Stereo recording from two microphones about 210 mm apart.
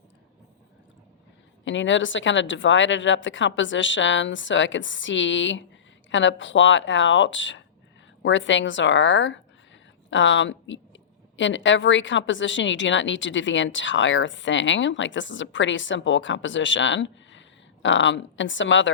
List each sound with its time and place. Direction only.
1.6 s a woman's voice: 60° left (ahead or behind)